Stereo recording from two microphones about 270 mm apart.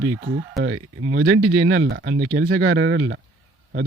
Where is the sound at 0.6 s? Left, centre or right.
Right.